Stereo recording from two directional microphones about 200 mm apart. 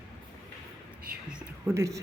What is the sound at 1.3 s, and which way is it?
Speech, 10° right (ahead or behind).